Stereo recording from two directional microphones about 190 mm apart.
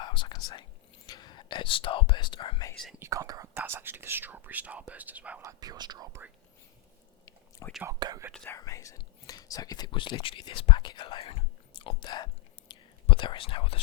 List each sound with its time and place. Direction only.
0.0 s whispering: 25° left (ahead or behind)
1.0 s speech: 20° left (ahead or behind)
3.0 s speech: 15° right (ahead or behind)
7.9 s speech: 20° right (ahead or behind)
8.3 s speech: 15° left (ahead or behind); by 13.8 s 30° left (ahead or behind)